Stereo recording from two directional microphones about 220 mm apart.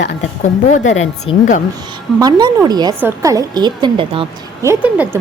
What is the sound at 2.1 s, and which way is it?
A woman's voice, 15° right (ahead or behind).